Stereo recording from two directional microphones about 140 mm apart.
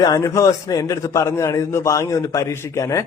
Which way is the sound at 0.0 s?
25° left (ahead or behind).